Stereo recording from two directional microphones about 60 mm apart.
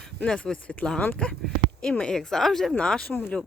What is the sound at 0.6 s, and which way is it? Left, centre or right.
Speech, left.